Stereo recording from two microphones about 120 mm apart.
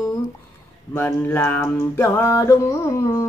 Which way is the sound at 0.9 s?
15° left (ahead or behind).